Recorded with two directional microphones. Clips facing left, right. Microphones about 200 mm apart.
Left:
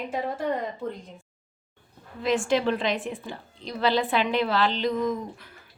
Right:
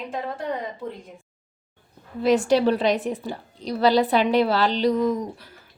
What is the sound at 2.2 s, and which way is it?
A woman's voice, 40° right (ahead or behind).